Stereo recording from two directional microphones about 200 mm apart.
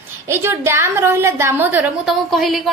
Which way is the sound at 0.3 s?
15° right (ahead or behind).